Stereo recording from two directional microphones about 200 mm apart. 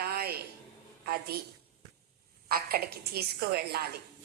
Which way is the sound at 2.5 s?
50° right (ahead or behind).